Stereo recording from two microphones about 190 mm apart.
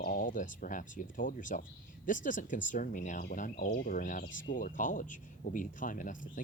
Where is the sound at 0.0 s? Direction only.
45° left (ahead or behind).